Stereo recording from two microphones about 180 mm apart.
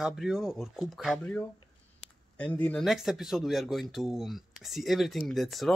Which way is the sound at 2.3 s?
10° left (ahead or behind).